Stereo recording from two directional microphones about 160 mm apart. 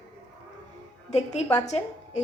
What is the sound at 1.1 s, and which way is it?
A woman's voice, 45° left (ahead or behind).